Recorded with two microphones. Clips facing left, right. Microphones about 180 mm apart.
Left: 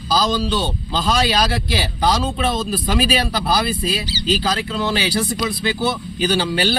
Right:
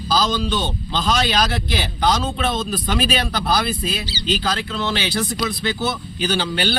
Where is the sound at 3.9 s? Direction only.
35° left (ahead or behind).